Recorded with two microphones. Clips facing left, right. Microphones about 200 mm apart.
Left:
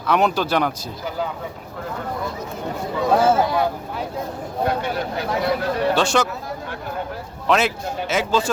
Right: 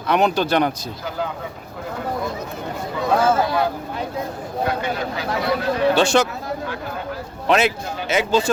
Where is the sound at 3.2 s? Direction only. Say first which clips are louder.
Left 1 dB; 20° left (ahead or behind).